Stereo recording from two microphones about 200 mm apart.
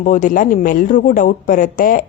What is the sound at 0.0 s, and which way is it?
A woman's voice, 40° left (ahead or behind).